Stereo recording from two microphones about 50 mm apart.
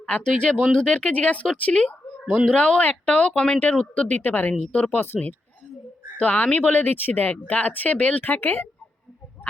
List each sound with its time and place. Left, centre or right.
0.2 s speech: centre
4.2 s speech: left
4.5 s speech: left
4.9 s speech: left
6.1 s speech: left